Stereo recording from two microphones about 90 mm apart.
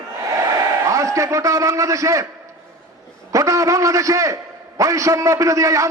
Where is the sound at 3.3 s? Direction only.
35° right (ahead or behind).